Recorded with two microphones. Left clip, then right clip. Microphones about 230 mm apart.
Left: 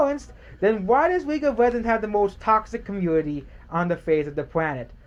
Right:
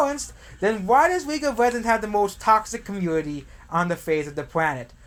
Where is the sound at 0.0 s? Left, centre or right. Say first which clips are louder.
Left 1 dB; right.